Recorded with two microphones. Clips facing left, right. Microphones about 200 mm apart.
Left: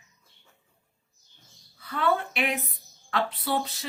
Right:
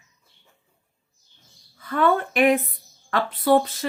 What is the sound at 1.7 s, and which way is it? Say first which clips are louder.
Speech: right 5 dB; 50° right (ahead or behind).